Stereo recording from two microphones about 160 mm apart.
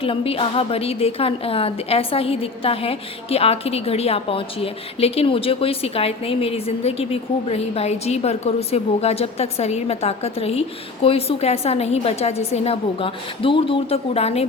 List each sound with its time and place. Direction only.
0.0 s a woman's voice: 35° left (ahead or behind)